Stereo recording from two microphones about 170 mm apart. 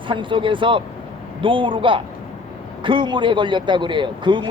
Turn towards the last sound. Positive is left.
turn(degrees=-30)  # may be behind; listen again after turning